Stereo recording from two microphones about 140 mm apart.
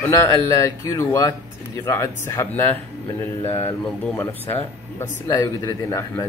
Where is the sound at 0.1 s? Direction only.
20° left (ahead or behind).